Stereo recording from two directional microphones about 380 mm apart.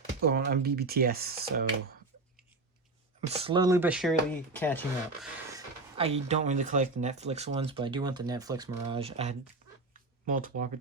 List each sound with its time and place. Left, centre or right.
0.2 s speech: right
3.2 s speech: centre
5.5 s speech: centre